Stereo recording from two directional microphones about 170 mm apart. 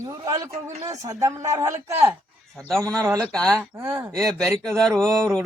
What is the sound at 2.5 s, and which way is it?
Speech, 5° left (ahead or behind).